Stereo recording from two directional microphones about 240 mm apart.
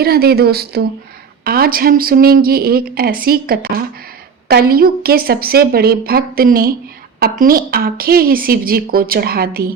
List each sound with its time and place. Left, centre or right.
0.0 s a woman's voice: right